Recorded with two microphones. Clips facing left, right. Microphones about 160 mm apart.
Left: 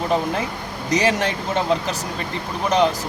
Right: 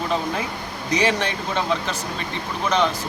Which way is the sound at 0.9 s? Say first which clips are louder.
Left 2 dB; 45° left (ahead or behind).